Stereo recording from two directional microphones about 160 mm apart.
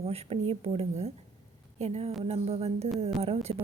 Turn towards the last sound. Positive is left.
turn(degrees=-40)  # may be behind; listen again after turning